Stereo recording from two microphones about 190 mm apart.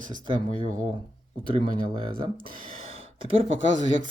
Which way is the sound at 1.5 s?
30° right (ahead or behind).